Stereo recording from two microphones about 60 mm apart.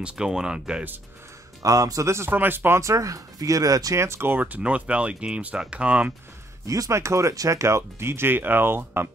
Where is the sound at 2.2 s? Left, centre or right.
Right.